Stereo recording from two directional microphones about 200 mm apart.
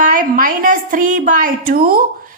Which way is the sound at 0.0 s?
40° right (ahead or behind).